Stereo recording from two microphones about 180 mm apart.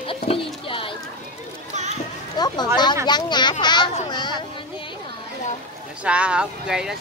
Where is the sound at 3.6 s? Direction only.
25° left (ahead or behind).